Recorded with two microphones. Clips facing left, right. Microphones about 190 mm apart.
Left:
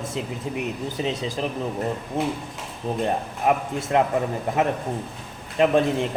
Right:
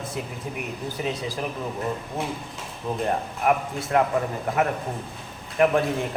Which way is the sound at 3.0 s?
20° left (ahead or behind).